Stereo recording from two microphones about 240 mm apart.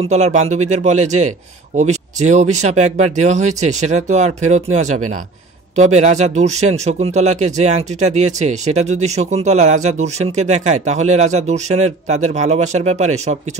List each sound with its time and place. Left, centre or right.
0.0 s speech: right